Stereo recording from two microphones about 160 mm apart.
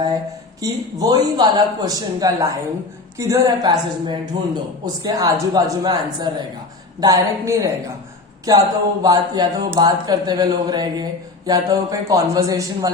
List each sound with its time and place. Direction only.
0.6 s speech: 25° right (ahead or behind)